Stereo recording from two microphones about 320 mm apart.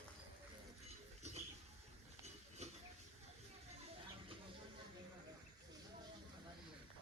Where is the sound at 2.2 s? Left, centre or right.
Right.